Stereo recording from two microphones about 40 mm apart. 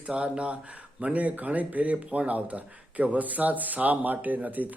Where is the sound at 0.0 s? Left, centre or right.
Right.